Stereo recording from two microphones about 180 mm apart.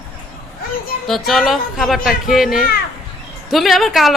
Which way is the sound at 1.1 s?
Centre (ahead or behind).